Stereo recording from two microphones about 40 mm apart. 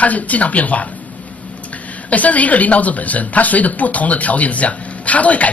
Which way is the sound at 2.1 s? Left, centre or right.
Left.